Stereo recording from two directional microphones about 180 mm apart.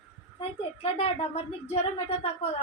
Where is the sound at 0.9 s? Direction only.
35° left (ahead or behind).